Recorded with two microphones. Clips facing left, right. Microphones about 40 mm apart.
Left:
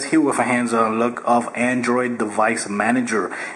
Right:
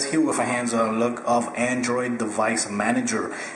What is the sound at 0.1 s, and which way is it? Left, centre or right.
Speech, centre.